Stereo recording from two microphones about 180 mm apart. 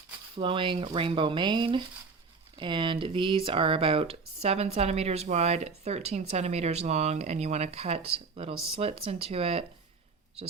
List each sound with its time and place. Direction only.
0.3 s speech: 30° right (ahead or behind)